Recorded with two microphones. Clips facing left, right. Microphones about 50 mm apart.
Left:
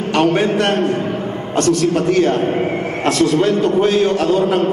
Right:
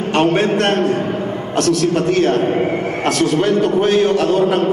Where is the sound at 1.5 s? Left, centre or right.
Right.